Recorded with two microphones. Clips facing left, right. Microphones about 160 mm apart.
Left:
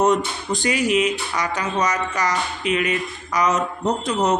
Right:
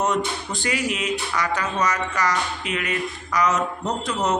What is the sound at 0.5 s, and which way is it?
Speech, 15° left (ahead or behind).